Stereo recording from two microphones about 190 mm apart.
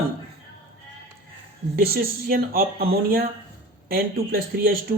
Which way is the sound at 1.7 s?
55° right (ahead or behind).